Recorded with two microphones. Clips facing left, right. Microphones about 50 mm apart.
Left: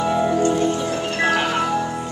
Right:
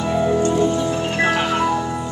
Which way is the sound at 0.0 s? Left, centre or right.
Centre.